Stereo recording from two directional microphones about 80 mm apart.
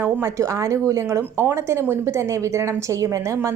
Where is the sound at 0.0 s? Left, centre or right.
Right.